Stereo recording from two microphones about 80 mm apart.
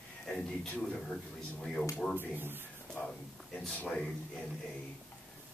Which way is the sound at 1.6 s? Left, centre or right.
Centre.